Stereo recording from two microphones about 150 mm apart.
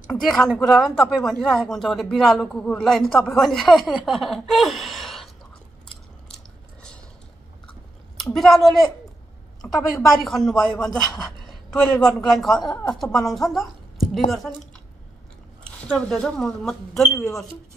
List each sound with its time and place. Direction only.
0.1 s a man's voice: centre (ahead or behind)
8.2 s a woman's voice: centre (ahead or behind)
15.9 s a man's voice: 5° left (ahead or behind)
17.0 s speech: 20° left (ahead or behind)